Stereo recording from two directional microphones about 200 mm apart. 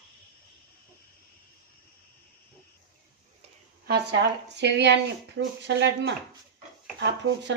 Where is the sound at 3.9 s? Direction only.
55° right (ahead or behind).